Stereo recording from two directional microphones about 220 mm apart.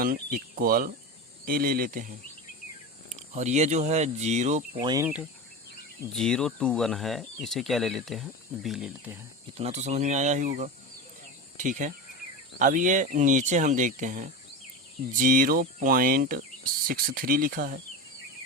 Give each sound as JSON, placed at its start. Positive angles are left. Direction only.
{"t": 0.0, "sound": "speech", "side_deg": -40}
{"t": 3.2, "sound": "speech", "side_deg": -30}
{"t": 4.8, "sound": "speech", "side_deg": -20}
{"t": 6.1, "sound": "speech", "side_deg": 5}
{"t": 9.6, "sound": "speech", "side_deg": -30}